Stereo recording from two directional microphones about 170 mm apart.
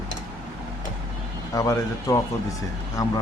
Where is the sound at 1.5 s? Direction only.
20° left (ahead or behind).